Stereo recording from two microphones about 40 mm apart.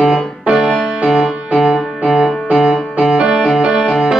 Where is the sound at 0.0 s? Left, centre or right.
Centre.